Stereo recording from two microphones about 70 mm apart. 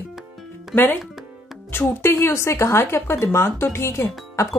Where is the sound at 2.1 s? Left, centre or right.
Left.